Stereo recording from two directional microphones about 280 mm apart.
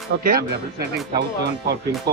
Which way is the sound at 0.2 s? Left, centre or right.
Right.